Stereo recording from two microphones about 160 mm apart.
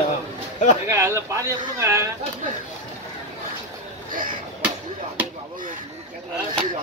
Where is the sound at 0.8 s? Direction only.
15° right (ahead or behind).